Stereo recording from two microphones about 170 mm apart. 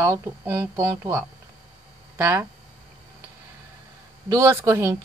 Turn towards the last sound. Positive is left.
turn(degrees=-15)  # may be behind; listen again after turning